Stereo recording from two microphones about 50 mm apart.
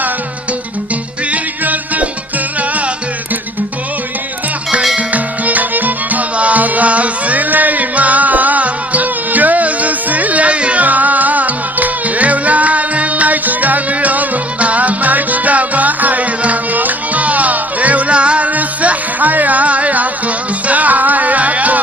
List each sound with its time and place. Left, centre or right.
1.3 s music: right
4.9 s music: right